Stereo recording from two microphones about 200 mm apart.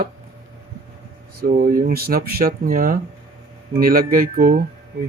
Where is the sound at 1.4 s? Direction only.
45° right (ahead or behind).